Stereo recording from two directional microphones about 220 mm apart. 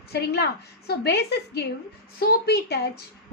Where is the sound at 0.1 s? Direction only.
50° left (ahead or behind).